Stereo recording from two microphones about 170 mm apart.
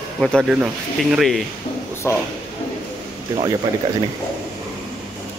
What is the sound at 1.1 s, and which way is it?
Speech, centre (ahead or behind).